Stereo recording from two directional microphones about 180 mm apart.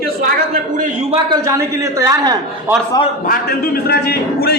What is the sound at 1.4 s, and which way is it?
Speech, 15° right (ahead or behind).